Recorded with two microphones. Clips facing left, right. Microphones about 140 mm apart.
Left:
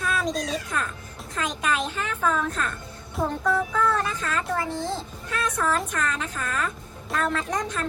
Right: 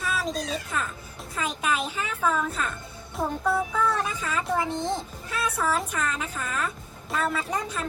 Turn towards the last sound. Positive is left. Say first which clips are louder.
# left 2 dB
turn(degrees=-10)  # may be behind; listen again after turning